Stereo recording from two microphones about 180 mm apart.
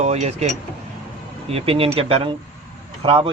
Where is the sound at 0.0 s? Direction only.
35° right (ahead or behind).